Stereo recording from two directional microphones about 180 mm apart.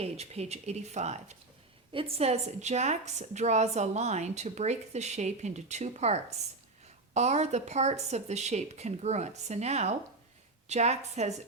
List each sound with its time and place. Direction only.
0.0 s a woman's voice: 35° right (ahead or behind)